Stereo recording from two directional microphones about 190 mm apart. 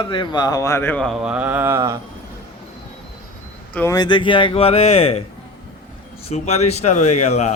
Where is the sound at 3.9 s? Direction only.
25° left (ahead or behind).